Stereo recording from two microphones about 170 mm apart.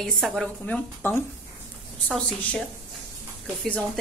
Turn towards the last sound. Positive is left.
turn(degrees=5)  # may be behind; listen again after turning